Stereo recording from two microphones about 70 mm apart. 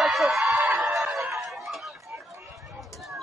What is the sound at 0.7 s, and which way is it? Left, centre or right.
Music, centre.